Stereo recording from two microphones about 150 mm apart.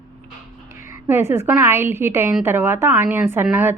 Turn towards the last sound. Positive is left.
turn(degrees=-15)  # may be behind; listen again after turning